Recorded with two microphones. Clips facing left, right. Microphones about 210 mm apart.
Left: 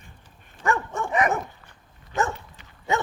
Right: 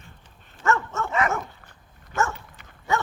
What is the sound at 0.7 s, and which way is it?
Dog, 15° left (ahead or behind).